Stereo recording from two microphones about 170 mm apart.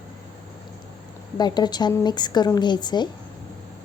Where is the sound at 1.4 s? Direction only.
25° left (ahead or behind).